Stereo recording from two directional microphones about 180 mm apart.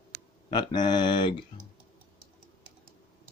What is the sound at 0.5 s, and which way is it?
Speech, 25° left (ahead or behind).